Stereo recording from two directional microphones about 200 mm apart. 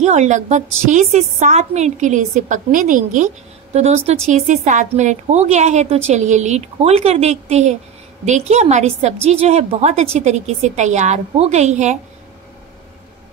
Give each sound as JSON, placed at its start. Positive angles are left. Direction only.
{"t": 0.0, "sound": "a woman's voice", "side_deg": -35}